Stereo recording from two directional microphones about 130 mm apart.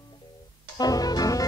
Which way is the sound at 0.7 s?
30° left (ahead or behind).